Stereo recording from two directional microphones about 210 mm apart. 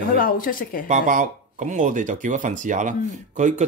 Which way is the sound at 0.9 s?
40° right (ahead or behind).